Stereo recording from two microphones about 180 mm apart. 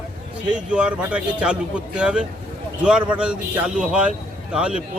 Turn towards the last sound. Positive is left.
turn(degrees=-5)  # may be behind; listen again after turning